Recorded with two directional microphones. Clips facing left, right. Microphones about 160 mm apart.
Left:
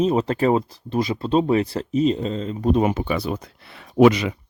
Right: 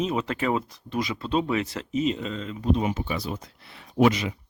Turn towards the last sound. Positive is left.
turn(degrees=75)  # may be behind; listen again after turning